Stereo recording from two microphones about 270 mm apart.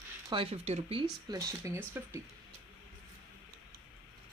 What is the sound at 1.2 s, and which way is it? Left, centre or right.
Speech, centre.